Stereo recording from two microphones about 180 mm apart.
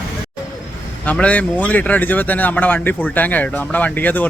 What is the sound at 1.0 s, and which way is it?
Speech, 5° left (ahead or behind).